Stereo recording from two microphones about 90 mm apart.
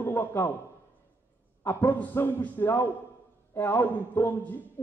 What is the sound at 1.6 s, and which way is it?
A man's voice, 25° left (ahead or behind).